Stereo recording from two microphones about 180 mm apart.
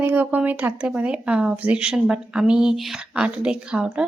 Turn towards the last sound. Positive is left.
turn(degrees=-5)  # may be behind; listen again after turning